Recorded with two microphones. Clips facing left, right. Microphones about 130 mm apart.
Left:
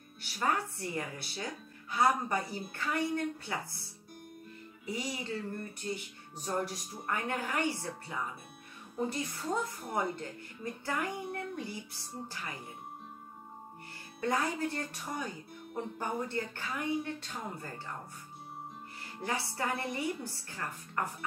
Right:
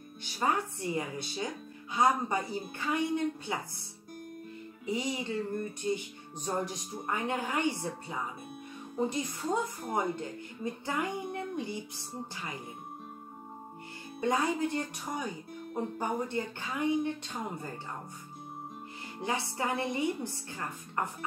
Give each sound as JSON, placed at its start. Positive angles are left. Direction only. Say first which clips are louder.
{"t": 0.2, "sound": "speech", "louder": "right 2 dB", "side_deg": -20}
{"t": 4.8, "sound": "speech", "louder": "right 4 dB", "side_deg": -20}
{"t": 14.2, "sound": "speech", "louder": "right 3 dB", "side_deg": -15}
{"t": 19.2, "sound": "speech", "louder": "right 2 dB", "side_deg": -20}